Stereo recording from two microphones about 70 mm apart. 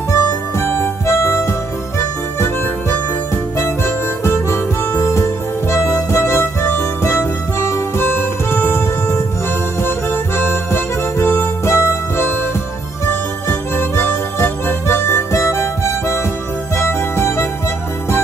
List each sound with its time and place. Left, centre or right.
0.1 s harmonica: left
3.5 s harmonica: left
16.7 s music: left